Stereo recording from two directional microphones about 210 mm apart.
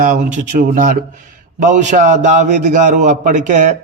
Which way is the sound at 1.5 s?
35° right (ahead or behind).